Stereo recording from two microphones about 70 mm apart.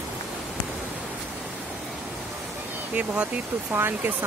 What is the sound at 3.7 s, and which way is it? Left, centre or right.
Speech, right.